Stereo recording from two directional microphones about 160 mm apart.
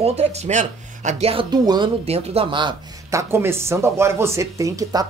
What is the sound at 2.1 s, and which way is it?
Speech, 40° right (ahead or behind).